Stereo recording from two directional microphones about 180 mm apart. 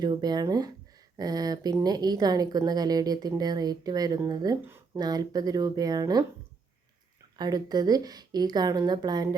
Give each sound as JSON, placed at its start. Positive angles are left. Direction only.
{"t": 0.0, "sound": "a woman's voice", "side_deg": -25}
{"t": 7.3, "sound": "a woman's voice", "side_deg": -20}